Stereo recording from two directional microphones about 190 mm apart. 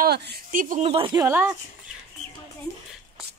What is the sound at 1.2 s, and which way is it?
Speech, 10° right (ahead or behind).